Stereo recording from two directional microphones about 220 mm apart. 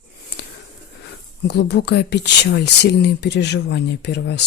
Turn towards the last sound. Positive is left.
turn(degrees=50)  # may be behind; listen again after turning